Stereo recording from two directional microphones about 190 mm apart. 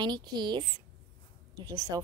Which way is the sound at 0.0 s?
20° right (ahead or behind).